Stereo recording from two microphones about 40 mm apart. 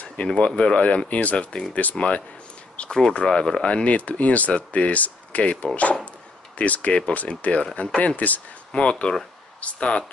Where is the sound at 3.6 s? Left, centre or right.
Left.